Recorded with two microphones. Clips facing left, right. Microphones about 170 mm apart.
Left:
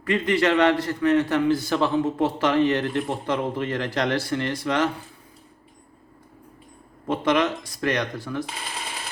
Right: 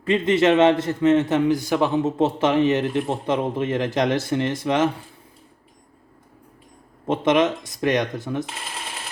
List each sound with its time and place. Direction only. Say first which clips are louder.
0.0 s a man's voice: right 3 dB; 20° right (ahead or behind)
7.1 s a man's voice: right 3 dB; 20° right (ahead or behind)
8.4 s shuffling cards: even; centre (ahead or behind)